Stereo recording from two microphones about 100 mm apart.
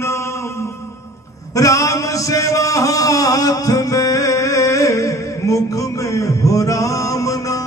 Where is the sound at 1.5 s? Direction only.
35° left (ahead or behind).